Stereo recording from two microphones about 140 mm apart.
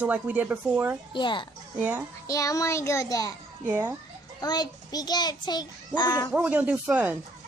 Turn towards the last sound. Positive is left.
turn(degrees=-10)  # may be behind; listen again after turning